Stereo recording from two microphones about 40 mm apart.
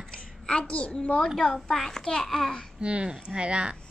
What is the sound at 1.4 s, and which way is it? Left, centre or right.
A child's voice, centre.